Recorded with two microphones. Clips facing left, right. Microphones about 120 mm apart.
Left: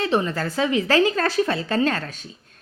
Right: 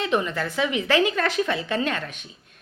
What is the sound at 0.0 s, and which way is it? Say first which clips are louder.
A woman's voice: left 2 dB; 35° left (ahead or behind).